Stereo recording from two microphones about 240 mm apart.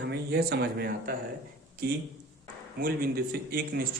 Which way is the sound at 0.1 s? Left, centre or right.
Right.